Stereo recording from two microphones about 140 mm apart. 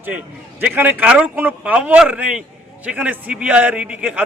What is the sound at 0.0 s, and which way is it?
A man's voice, 10° right (ahead or behind).